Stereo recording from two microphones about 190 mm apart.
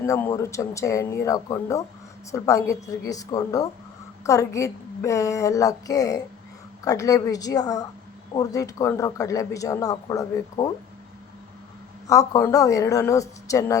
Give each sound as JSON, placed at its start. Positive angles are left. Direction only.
{"t": 0.0, "sound": "speech", "side_deg": 15}
{"t": 12.0, "sound": "speech", "side_deg": 15}